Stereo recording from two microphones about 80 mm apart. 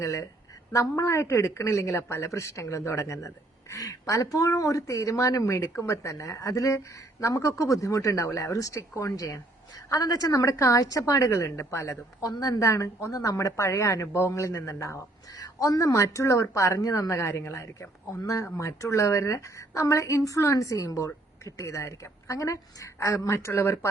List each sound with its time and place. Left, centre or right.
0.0 s a woman's voice: left